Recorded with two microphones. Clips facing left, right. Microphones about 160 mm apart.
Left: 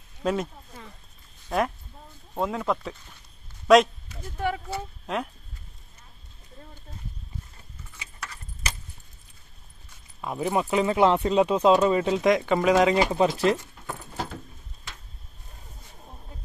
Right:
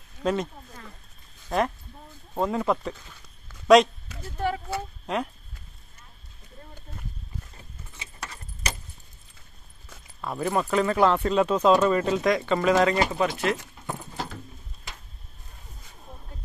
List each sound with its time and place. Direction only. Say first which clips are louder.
0.2 s a sound: even; 5° left (ahead or behind)
1.5 s speech: right 1 dB; 5° left (ahead or behind)
5.0 s speech: right 1 dB; centre (ahead or behind)
8.0 s keys jangling: right 1 dB; 30° right (ahead or behind)
10.2 s speech: even; 15° left (ahead or behind)
13.1 s speech: left 4 dB; 30° left (ahead or behind)